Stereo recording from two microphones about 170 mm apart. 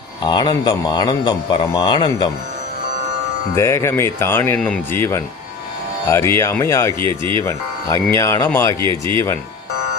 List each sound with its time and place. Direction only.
0.3 s speech: 25° left (ahead or behind)
3.5 s speech: 15° left (ahead or behind)
7.0 s speech: 30° right (ahead or behind)
7.4 s speech: 20° left (ahead or behind)
8.8 s speech: 30° right (ahead or behind)
9.1 s speech: 15° left (ahead or behind)